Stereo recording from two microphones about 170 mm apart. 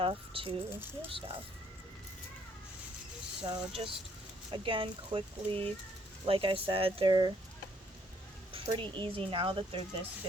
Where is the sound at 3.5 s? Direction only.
30° right (ahead or behind).